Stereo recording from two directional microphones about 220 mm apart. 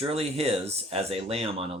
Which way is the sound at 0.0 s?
25° right (ahead or behind).